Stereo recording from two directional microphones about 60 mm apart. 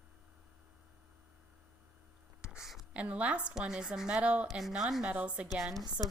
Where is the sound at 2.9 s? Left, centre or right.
Right.